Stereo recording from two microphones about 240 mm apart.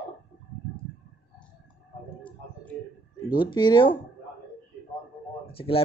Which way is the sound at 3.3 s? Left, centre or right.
Centre.